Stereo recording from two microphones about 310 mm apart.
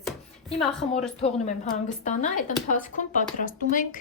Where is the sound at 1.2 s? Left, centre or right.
Left.